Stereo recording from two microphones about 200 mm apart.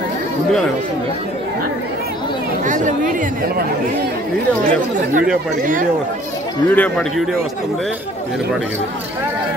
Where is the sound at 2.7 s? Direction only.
40° right (ahead or behind).